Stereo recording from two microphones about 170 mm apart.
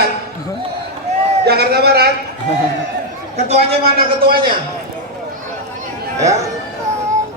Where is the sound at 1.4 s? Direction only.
70° right (ahead or behind).